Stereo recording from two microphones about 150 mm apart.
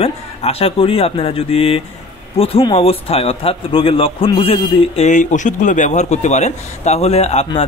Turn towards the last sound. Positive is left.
turn(degrees=45)  # may be behind; listen again after turning